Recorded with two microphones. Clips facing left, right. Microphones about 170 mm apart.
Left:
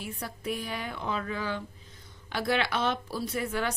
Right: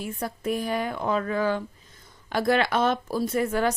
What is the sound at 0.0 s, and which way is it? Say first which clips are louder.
Speech: right 6 dB; 45° right (ahead or behind).